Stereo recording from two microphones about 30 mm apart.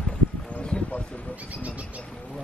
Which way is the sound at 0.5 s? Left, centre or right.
Left.